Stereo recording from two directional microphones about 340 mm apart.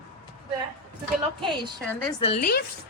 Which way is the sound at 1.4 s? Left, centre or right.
Centre.